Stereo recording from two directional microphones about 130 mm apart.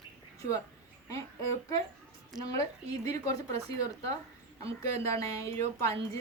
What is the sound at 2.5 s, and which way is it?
Speech, 25° left (ahead or behind).